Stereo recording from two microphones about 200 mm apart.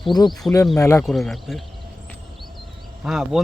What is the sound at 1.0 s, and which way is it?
Speech, centre (ahead or behind).